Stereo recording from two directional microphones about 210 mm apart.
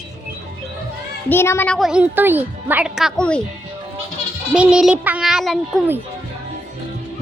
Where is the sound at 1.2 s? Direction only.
10° left (ahead or behind).